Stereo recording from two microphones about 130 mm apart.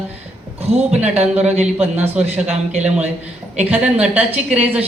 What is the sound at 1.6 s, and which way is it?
A man's voice, 15° right (ahead or behind).